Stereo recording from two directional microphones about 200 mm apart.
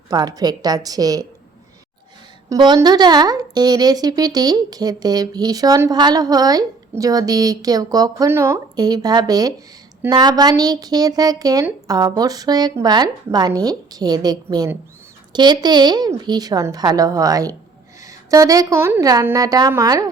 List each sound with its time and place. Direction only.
0.1 s speech: 20° right (ahead or behind)
2.5 s a woman's voice: 20° right (ahead or behind)